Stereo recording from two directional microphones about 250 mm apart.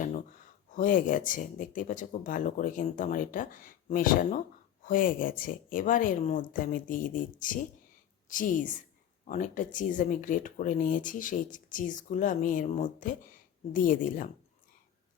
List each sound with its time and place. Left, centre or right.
0.7 s speech: left
8.3 s speech: left